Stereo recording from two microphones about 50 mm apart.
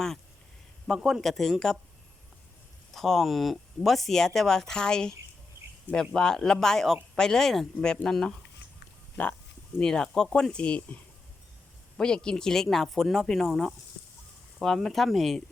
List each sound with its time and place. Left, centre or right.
0.9 s speech: centre
2.9 s speech: centre
6.1 s speech: centre
9.2 s speech: left
9.8 s speech: centre
11.9 s speech: centre
14.6 s speech: centre